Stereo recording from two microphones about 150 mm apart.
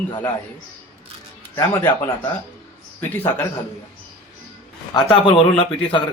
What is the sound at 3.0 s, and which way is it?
Speech, 15° left (ahead or behind).